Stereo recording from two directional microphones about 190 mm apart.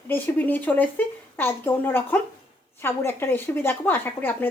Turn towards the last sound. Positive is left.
turn(degrees=10)  # may be behind; listen again after turning